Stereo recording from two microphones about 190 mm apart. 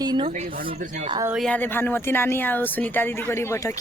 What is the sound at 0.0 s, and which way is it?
Speech, 20° right (ahead or behind).